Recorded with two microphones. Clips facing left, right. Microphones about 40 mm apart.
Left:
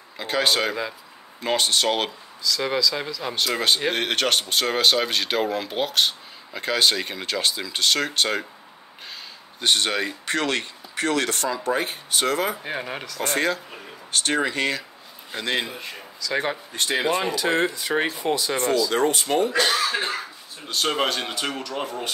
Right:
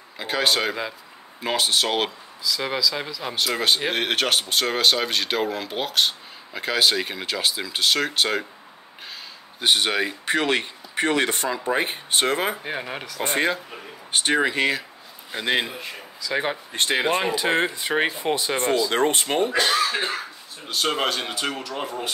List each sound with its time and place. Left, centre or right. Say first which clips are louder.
0.2 s speech: even; centre
9.6 s speech: right 1 dB; centre; by 12.5 s right
12.6 s speech: even; centre
13.2 s speech: right 1 dB; right
16.7 s speech: right 1 dB; right
17.3 s speech: even; right
19.9 s speech: even; centre